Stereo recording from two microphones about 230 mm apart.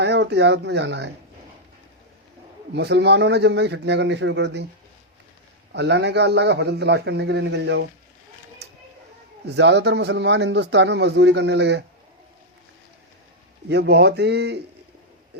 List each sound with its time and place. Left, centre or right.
0.0 s speech: right
2.7 s a man's voice: right
5.7 s a man's voice: right
8.6 s a sound: right
9.6 s a man's voice: right
13.7 s a man's voice: right